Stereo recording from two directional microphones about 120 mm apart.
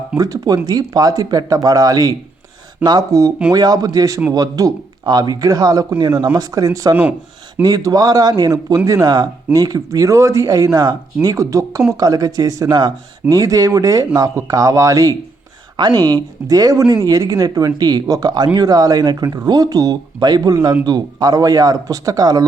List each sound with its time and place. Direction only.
0.2 s speech: 30° right (ahead or behind)